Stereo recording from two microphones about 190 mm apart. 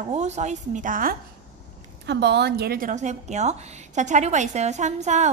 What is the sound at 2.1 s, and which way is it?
A woman's voice, 65° right (ahead or behind).